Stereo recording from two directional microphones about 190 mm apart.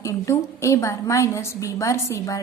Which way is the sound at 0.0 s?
15° left (ahead or behind).